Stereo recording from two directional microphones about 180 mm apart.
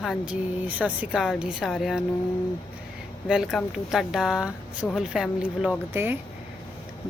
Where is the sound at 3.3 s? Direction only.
Centre (ahead or behind).